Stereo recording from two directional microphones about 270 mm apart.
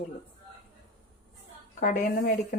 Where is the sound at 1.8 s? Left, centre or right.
Left.